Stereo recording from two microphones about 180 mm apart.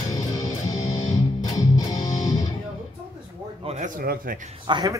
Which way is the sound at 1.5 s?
20° left (ahead or behind).